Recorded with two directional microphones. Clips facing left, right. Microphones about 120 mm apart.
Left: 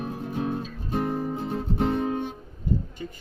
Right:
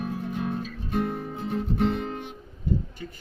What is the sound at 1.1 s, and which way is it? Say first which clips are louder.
Music: left 2 dB; 35° left (ahead or behind).